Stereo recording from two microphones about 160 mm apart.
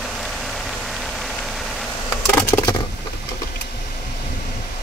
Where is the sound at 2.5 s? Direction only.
15° left (ahead or behind).